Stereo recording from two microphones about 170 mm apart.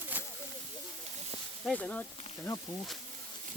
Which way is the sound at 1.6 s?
5° left (ahead or behind).